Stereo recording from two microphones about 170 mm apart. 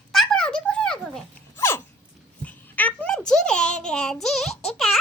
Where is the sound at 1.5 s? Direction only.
15° left (ahead or behind).